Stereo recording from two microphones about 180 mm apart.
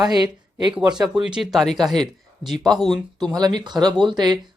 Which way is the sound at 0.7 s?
5° right (ahead or behind).